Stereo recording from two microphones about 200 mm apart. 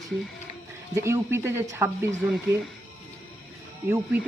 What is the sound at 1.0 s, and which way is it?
Speech, 15° right (ahead or behind).